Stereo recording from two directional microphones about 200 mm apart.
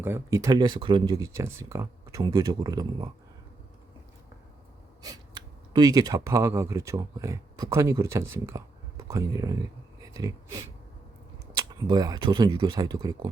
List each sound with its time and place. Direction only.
0.0 s speech: 15° right (ahead or behind)
5.0 s speech: 20° right (ahead or behind)